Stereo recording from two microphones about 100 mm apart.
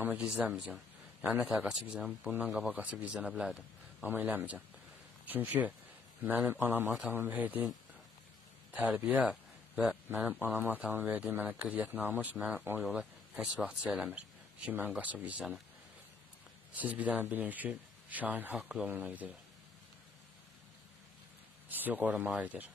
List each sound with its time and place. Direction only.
0.0 s speech: 15° right (ahead or behind)
2.8 s speech: 15° right (ahead or behind)
4.0 s a man's voice: 15° right (ahead or behind)
8.7 s speech: 15° right (ahead or behind)
12.8 s speech: centre (ahead or behind)
16.7 s speech: 15° right (ahead or behind)
21.6 s speech: 20° right (ahead or behind)